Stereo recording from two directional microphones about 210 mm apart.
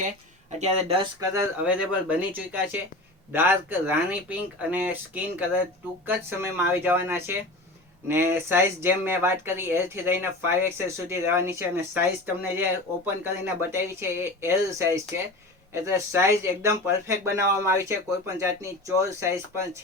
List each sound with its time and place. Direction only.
0.6 s speech: 30° right (ahead or behind)
1.2 s speech: 15° right (ahead or behind)